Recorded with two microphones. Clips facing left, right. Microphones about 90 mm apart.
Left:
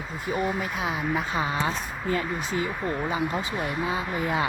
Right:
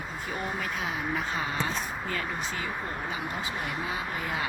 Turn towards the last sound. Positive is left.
turn(degrees=20)  # may be behind; listen again after turning